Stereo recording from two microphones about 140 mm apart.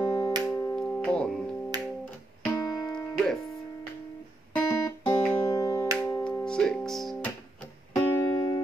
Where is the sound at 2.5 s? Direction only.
25° left (ahead or behind).